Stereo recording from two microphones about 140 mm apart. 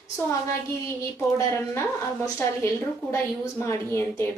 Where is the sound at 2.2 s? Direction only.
20° left (ahead or behind).